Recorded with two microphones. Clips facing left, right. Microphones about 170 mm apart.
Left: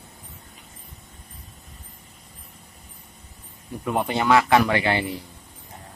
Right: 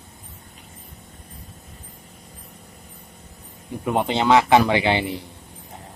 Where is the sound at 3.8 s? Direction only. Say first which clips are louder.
Right 2 dB; 20° right (ahead or behind).